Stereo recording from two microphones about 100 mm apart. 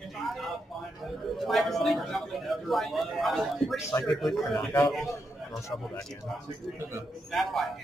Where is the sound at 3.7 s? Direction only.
30° left (ahead or behind).